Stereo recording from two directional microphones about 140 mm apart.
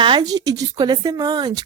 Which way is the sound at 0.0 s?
30° right (ahead or behind).